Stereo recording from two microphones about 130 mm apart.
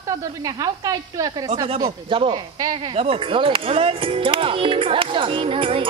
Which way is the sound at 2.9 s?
50° right (ahead or behind).